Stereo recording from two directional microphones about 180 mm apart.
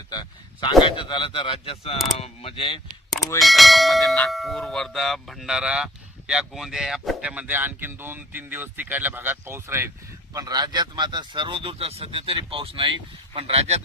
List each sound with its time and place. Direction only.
0.1 s speech: 25° left (ahead or behind)
3.4 s clang: centre (ahead or behind)
10.3 s speech: 20° right (ahead or behind)